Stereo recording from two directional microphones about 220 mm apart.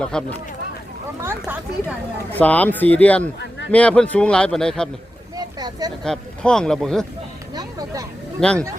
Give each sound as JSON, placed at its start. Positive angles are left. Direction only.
{"t": 0.0, "sound": "speech", "side_deg": 5}
{"t": 1.2, "sound": "speech", "side_deg": -10}
{"t": 2.3, "sound": "speech", "side_deg": 5}
{"t": 5.5, "sound": "a sound", "side_deg": -20}
{"t": 6.0, "sound": "speech", "side_deg": 5}
{"t": 7.5, "sound": "a sound", "side_deg": -15}
{"t": 8.4, "sound": "speech", "side_deg": 5}